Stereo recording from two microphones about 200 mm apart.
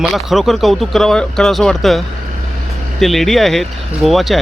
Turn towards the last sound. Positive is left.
turn(degrees=0)  # may be behind; listen again after turning